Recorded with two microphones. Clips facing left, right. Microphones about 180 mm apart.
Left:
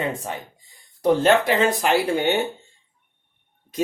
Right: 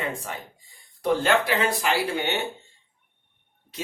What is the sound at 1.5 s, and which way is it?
Speech, 20° left (ahead or behind).